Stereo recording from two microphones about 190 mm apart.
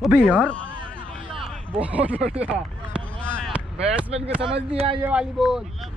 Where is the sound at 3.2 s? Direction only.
5° left (ahead or behind).